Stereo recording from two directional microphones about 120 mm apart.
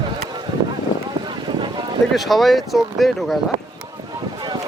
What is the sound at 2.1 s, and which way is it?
Speech, centre (ahead or behind).